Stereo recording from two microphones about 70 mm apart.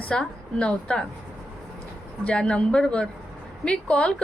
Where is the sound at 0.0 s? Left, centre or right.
Centre.